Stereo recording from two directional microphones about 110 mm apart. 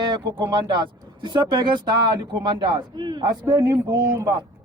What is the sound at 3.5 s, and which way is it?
Speech, 25° right (ahead or behind).